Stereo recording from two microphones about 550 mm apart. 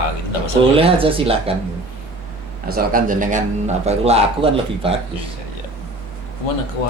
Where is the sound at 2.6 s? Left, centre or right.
Centre.